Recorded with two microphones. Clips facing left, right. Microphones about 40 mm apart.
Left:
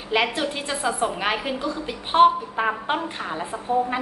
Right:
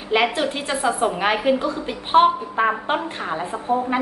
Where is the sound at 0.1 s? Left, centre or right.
Centre.